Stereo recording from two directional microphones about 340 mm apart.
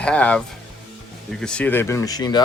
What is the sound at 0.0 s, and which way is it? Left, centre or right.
Speech, centre.